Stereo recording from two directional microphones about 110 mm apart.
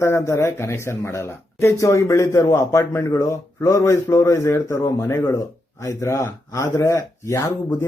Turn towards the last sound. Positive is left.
turn(degrees=30)  # may be behind; listen again after turning